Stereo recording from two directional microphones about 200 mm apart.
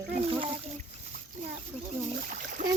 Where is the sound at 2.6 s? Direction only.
40° right (ahead or behind).